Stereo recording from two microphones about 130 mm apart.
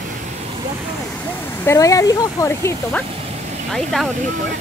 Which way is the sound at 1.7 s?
25° left (ahead or behind).